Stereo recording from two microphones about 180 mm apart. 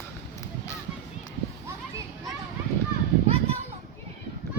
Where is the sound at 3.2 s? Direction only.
35° right (ahead or behind).